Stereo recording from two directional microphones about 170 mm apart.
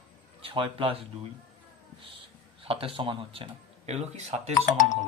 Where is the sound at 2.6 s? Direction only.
35° right (ahead or behind).